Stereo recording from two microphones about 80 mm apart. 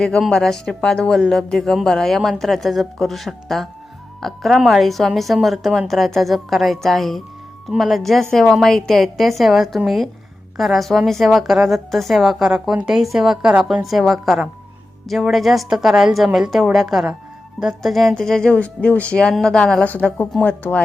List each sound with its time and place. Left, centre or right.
0.0 s a woman's voice: centre
19.8 s a woman's voice: centre